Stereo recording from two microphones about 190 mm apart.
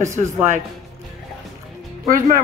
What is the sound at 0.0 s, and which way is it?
Speech, 15° right (ahead or behind).